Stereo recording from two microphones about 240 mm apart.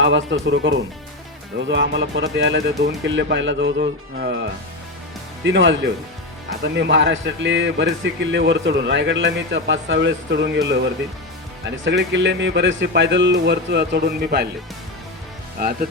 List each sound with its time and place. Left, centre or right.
0.0 s a man's voice: right
5.5 s a man's voice: right
15.6 s speech: right